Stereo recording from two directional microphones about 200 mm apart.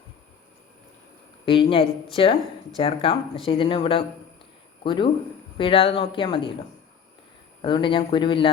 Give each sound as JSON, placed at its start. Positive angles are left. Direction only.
{"t": 1.5, "sound": "speech", "side_deg": 25}
{"t": 7.6, "sound": "speech", "side_deg": 25}